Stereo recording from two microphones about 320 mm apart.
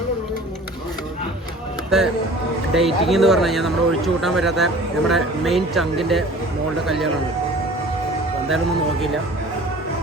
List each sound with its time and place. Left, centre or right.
2.7 s speech: centre
8.4 s speech: centre